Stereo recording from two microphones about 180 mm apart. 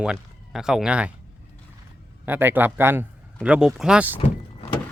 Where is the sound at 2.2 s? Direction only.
10° right (ahead or behind).